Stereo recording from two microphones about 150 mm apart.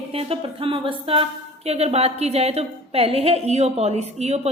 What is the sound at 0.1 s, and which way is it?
A woman's voice, 40° right (ahead or behind).